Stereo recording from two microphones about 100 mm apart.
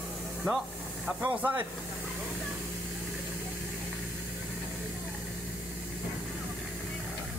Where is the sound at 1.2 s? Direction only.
15° right (ahead or behind).